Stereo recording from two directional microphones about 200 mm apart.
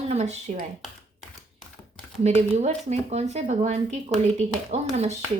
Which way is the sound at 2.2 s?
35° right (ahead or behind).